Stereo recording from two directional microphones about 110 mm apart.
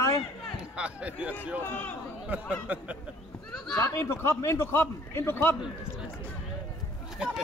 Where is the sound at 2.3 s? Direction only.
15° right (ahead or behind).